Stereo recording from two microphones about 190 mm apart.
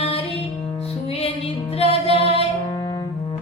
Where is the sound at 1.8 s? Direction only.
30° left (ahead or behind).